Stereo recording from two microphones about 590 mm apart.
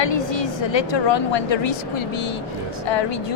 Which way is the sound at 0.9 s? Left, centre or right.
Left.